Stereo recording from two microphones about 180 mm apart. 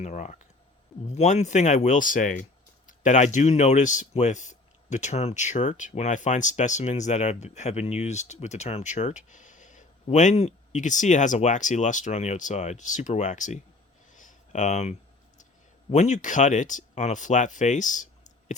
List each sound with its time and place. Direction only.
0.0 s speech: 40° left (ahead or behind)
14.1 s a sound: 45° left (ahead or behind)
15.9 s speech: 40° left (ahead or behind)